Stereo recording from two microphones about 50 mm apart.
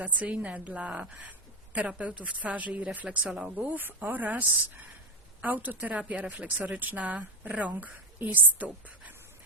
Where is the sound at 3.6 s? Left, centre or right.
Right.